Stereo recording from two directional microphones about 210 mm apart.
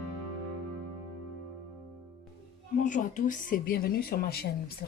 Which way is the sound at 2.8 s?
40° left (ahead or behind).